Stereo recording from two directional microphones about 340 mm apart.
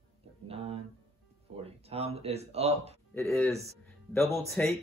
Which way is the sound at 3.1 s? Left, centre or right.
Centre.